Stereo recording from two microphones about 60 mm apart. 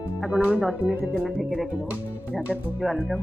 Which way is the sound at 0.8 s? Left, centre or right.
Right.